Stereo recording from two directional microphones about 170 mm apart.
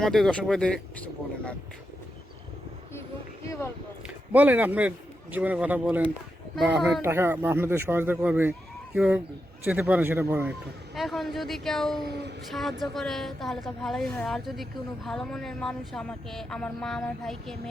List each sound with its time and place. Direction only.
0.0 s a woman's voice: centre (ahead or behind)
3.4 s a sound: 20° left (ahead or behind)
4.0 s a man's voice: 10° right (ahead or behind)
7.0 s speech: 15° right (ahead or behind)
10.9 s a woman's voice: centre (ahead or behind)
12.0 s a sound: 80° right
12.5 s a woman's voice: centre (ahead or behind)